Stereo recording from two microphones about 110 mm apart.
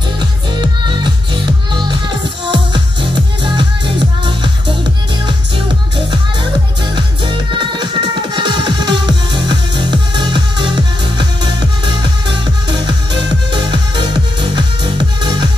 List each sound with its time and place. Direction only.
0.2 s music: 45° right (ahead or behind)
6.0 s music: 45° right (ahead or behind)